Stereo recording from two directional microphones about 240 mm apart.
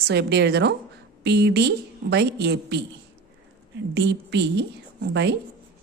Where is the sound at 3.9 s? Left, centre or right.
Right.